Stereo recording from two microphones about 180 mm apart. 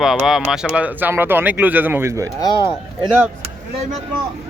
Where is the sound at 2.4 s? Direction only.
25° left (ahead or behind).